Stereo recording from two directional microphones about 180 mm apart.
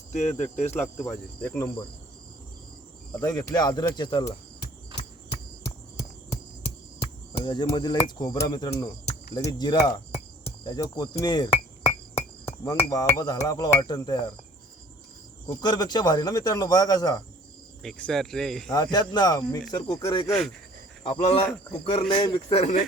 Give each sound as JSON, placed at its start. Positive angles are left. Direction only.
{"t": 0.1, "sound": "cricket", "side_deg": 40}
{"t": 1.0, "sound": "cricket", "side_deg": 10}
{"t": 3.2, "sound": "a man's voice", "side_deg": 20}
{"t": 7.3, "sound": "a man's voice", "side_deg": 25}
{"t": 15.4, "sound": "a man's voice", "side_deg": 20}
{"t": 17.8, "sound": "speech", "side_deg": 5}
{"t": 18.7, "sound": "a man's voice", "side_deg": 20}
{"t": 21.0, "sound": "cricket", "side_deg": 35}